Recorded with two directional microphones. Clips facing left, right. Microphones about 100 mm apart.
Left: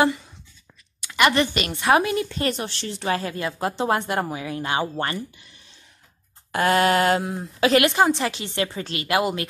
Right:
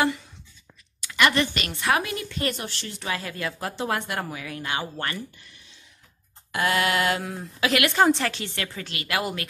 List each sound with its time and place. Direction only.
1.0 s a woman's voice: 25° left (ahead or behind)
6.5 s a sound: 40° left (ahead or behind)
7.2 s speech: 25° left (ahead or behind)
8.2 s speech: 20° left (ahead or behind)